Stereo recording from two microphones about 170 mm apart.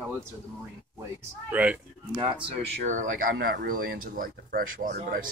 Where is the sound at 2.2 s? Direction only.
30° right (ahead or behind).